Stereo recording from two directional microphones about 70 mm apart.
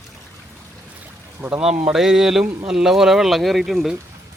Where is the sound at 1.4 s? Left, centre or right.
Centre.